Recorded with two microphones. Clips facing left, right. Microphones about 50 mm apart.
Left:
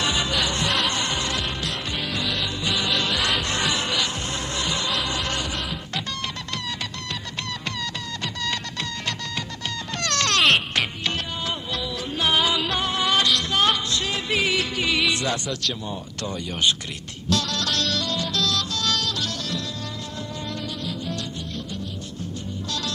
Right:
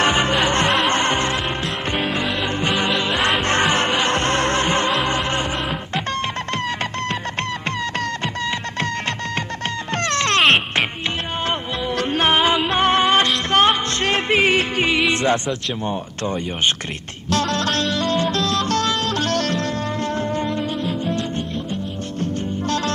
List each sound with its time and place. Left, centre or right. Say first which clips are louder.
0.0 s music: right 7 dB; right
9.9 s music: right 4 dB; right
11.4 s music: right 6 dB; right
12.3 s music: right 3 dB; right
20.4 s music: right 8 dB; right